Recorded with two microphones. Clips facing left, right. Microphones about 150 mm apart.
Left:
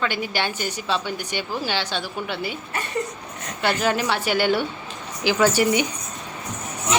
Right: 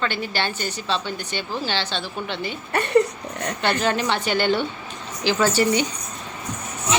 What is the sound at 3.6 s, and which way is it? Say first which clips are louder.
A woman's voice: left 1 dB; 5° left (ahead or behind).